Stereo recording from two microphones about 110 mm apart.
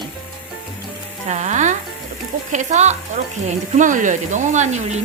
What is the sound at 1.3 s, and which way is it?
Frying, 90° right.